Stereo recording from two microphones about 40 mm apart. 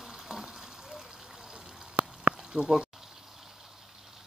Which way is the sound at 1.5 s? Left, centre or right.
Right.